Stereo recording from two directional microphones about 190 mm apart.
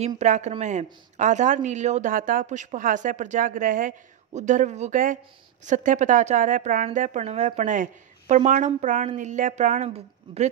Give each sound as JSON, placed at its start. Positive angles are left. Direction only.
{"t": 0.2, "sound": "a woman's voice", "side_deg": -35}